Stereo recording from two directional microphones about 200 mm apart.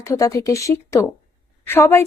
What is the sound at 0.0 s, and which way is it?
A woman's voice, 15° left (ahead or behind).